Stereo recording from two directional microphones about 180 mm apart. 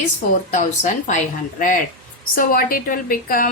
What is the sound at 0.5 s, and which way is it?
A woman's voice, 40° left (ahead or behind).